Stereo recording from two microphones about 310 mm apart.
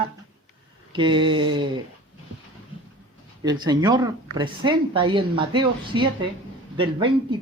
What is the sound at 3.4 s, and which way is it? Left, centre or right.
Speech, centre.